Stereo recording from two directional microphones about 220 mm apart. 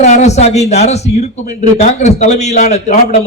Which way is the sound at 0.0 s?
30° left (ahead or behind).